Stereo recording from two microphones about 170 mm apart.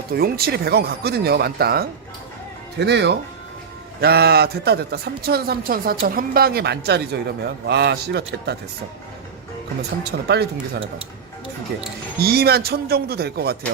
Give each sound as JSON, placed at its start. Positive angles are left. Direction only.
{"t": 0.1, "sound": "speech", "side_deg": -65}
{"t": 2.7, "sound": "speech", "side_deg": -85}
{"t": 4.0, "sound": "a woman's voice", "side_deg": -70}
{"t": 10.0, "sound": "speech", "side_deg": -75}
{"t": 12.2, "sound": "a woman's voice", "side_deg": -65}